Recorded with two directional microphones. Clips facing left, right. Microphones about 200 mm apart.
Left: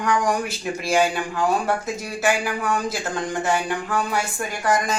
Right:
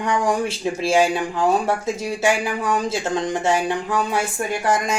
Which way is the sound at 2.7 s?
25° right (ahead or behind).